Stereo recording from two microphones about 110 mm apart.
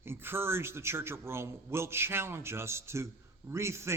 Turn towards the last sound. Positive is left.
turn(degrees=-25)  # may be behind; listen again after turning